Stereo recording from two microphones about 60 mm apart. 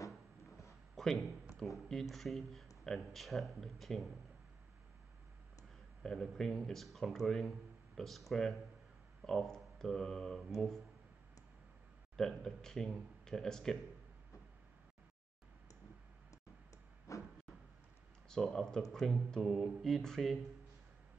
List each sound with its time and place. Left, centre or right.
0.9 s a sound: centre
1.9 s speech: centre
6.0 s speech: centre
12.2 s speech: centre
17.1 s a sound: left
18.3 s speech: centre